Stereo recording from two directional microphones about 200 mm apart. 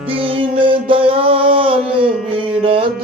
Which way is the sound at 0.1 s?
25° right (ahead or behind).